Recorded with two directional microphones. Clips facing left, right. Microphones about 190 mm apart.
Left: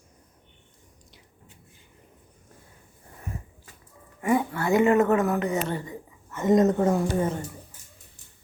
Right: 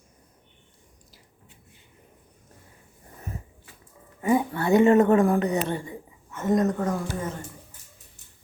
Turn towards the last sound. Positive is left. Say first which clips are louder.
# left 5 dB
turn(degrees=25)  # may be behind; listen again after turning